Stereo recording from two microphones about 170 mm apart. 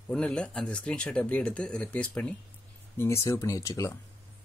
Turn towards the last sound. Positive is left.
turn(degrees=20)  # may be behind; listen again after turning